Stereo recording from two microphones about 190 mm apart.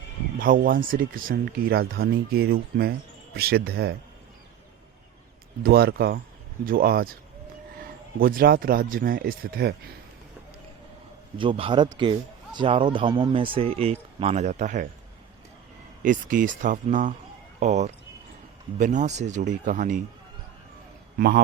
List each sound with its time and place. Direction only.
0.3 s speech: 45° right (ahead or behind)
5.6 s speech: 55° right (ahead or behind)
11.3 s speech: 25° right (ahead or behind)
16.0 s speech: 45° right (ahead or behind)
21.2 s speech: 60° right (ahead or behind)